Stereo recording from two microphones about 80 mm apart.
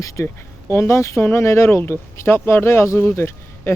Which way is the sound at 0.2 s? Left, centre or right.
Left.